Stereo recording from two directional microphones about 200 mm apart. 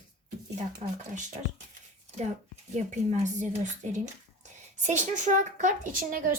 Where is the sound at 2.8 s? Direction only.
35° right (ahead or behind).